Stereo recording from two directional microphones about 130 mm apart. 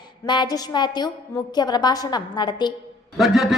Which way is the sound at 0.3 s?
35° left (ahead or behind).